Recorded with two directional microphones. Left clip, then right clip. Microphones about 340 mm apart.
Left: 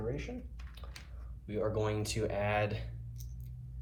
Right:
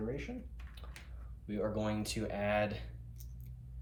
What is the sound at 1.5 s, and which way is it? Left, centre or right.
Speech, centre.